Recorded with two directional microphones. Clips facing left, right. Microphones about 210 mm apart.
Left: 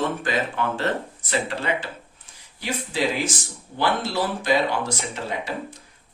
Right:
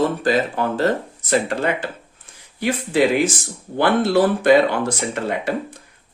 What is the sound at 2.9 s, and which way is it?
Speech, 55° right (ahead or behind).